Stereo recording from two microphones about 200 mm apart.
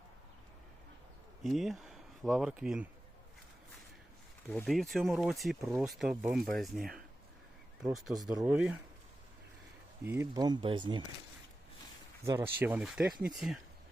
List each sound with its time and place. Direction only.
1.5 s speech: centre (ahead or behind)
4.4 s speech: centre (ahead or behind)
10.1 s speech: 15° right (ahead or behind)
12.2 s speech: 15° right (ahead or behind)